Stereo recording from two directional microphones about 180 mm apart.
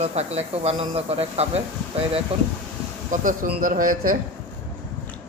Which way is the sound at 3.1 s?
45° right (ahead or behind).